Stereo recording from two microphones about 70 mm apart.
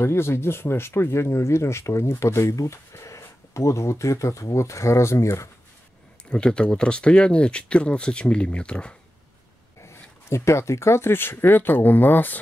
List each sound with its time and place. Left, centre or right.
0.0 s speech: left
6.3 s speech: centre
10.3 s speech: left